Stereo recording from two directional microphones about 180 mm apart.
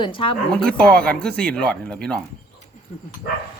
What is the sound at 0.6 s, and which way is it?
A woman's voice, 5° left (ahead or behind).